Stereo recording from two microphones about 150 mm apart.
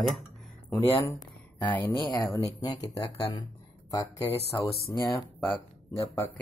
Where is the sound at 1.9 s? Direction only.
30° left (ahead or behind).